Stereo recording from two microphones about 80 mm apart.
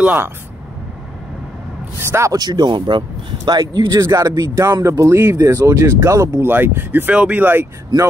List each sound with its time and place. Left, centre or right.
0.0 s speech: right
2.0 s speech: right
2.3 s speech: right
4.0 s speech: right
6.4 s speech: right